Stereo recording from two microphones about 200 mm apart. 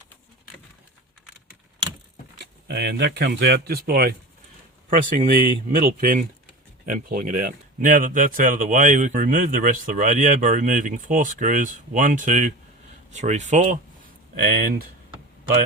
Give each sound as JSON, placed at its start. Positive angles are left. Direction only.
{"t": 2.4, "sound": "speech", "side_deg": -55}
{"t": 14.4, "sound": "speech", "side_deg": -50}